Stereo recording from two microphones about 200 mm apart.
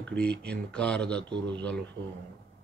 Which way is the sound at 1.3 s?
60° right (ahead or behind).